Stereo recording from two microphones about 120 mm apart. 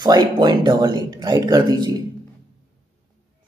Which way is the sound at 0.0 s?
35° right (ahead or behind).